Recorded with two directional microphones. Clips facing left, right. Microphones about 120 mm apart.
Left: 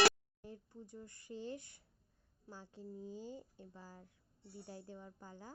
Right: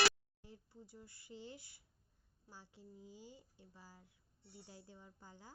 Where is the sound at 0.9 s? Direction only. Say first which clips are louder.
Left 6 dB; 10° right (ahead or behind).